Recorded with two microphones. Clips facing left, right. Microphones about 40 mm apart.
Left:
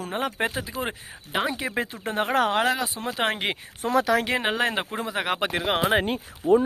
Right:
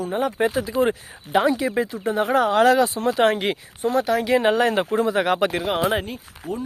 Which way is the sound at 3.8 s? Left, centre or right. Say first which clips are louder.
Right 1 dB; left.